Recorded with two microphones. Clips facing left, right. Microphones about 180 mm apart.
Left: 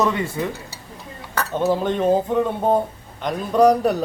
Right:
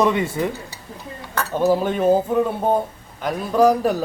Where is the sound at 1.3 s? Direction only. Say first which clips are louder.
Right 2 dB; 5° right (ahead or behind).